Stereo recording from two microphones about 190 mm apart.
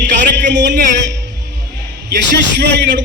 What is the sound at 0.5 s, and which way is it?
Speech, 70° right (ahead or behind).